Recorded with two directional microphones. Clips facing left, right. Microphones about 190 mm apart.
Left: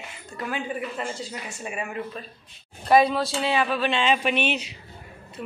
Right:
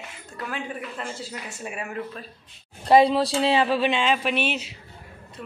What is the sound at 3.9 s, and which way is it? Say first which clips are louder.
Speech: even; 5° right (ahead or behind).